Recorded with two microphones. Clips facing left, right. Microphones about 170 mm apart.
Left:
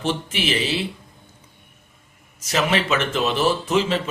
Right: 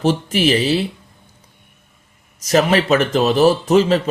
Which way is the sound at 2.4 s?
40° right (ahead or behind).